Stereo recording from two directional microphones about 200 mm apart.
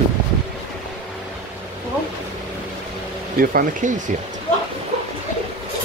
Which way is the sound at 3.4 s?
45° right (ahead or behind).